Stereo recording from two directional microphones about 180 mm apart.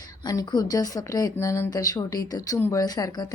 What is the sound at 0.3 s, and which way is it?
A woman's voice, 20° left (ahead or behind).